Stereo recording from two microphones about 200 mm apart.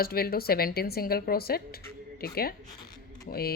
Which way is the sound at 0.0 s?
50° left (ahead or behind).